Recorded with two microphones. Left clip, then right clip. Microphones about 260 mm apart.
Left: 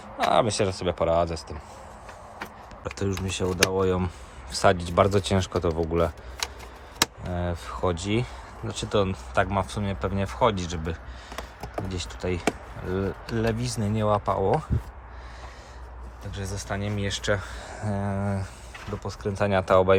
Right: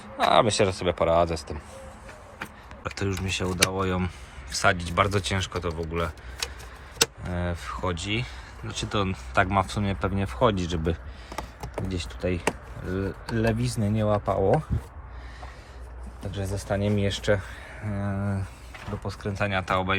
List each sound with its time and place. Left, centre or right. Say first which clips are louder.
0.2 s speech: right 2 dB; centre
2.8 s speech: even; centre
7.3 s speech: left 1 dB; centre
8.7 s speech: left 3 dB; centre
16.3 s speech: right 3 dB; centre